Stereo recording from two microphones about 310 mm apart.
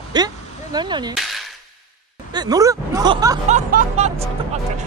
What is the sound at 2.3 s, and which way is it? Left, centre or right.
Speech, centre.